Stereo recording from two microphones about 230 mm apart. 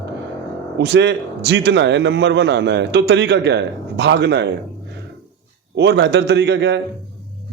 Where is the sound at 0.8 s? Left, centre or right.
Right.